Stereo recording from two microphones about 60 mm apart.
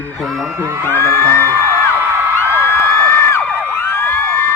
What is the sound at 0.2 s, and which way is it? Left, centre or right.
Speech, centre.